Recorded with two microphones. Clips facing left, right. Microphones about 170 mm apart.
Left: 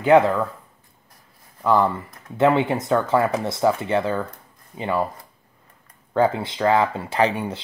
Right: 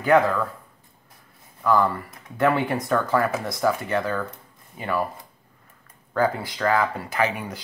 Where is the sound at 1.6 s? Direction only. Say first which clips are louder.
Left 2 dB; 25° left (ahead or behind).